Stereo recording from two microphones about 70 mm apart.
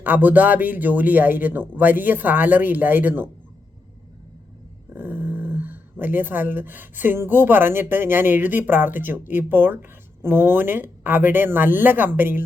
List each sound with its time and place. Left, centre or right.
0.0 s speech: right
4.9 s speech: right